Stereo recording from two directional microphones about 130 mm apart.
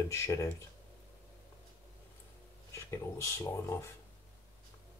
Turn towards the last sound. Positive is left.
turn(degrees=20)  # may be behind; listen again after turning